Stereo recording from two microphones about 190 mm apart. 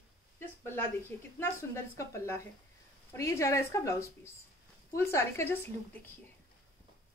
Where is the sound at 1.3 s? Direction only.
15° left (ahead or behind).